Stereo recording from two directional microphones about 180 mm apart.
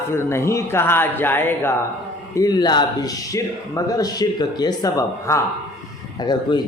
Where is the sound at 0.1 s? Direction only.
15° left (ahead or behind).